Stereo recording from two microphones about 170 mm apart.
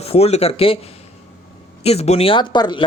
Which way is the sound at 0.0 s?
35° left (ahead or behind).